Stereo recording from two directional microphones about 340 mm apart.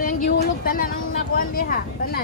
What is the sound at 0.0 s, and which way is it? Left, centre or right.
Vehicle, left.